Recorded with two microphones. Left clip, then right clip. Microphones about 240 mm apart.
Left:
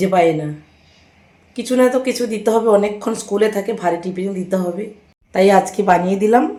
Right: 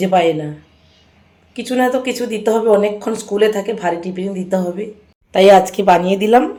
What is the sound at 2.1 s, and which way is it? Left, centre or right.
A woman's voice, centre.